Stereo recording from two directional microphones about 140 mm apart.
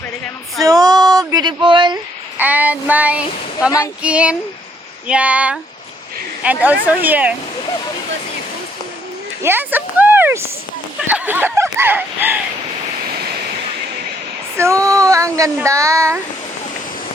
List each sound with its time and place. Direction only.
0.6 s a sound: 25° right (ahead or behind)
2.4 s speech: 10° right (ahead or behind)
9.4 s speech: 15° right (ahead or behind)
14.5 s speech: 20° right (ahead or behind)